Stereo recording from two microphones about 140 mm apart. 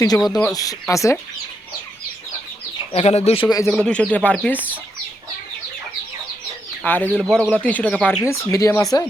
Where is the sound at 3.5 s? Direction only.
20° left (ahead or behind).